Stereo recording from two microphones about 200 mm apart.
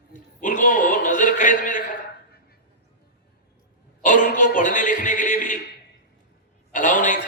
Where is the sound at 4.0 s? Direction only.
40° left (ahead or behind).